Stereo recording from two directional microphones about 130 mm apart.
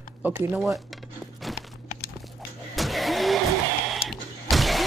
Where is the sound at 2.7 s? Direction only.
Centre (ahead or behind).